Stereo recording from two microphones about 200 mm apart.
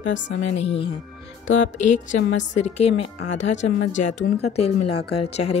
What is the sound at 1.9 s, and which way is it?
Speech, 40° left (ahead or behind).